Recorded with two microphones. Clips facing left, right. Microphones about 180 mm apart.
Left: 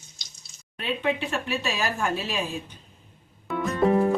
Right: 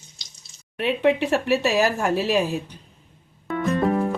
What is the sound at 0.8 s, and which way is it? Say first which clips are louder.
Speech: right 7 dB; 70° right (ahead or behind).